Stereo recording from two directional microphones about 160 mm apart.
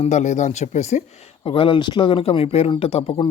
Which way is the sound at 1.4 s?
35° left (ahead or behind).